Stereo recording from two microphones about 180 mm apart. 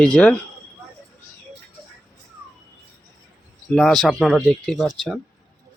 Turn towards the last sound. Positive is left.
turn(degrees=0)  # may be behind; listen again after turning